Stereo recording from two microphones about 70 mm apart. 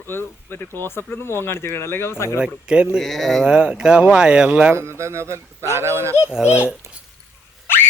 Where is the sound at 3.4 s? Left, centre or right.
Centre.